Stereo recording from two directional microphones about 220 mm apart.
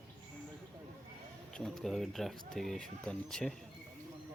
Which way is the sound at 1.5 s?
Centre (ahead or behind).